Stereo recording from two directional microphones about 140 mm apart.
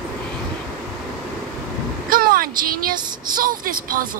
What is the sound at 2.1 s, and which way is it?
Vehicle, 90° right.